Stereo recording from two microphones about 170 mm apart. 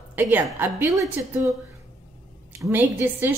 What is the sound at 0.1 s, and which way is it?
A woman's voice, 10° right (ahead or behind).